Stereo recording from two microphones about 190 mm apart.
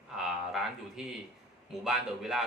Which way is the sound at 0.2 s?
Centre (ahead or behind).